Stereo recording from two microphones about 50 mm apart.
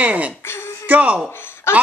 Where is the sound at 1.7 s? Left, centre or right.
Left.